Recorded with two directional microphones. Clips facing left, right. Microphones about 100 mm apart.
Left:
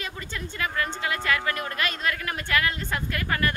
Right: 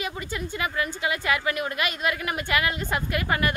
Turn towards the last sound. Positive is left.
turn(degrees=-15)  # may be behind; listen again after turning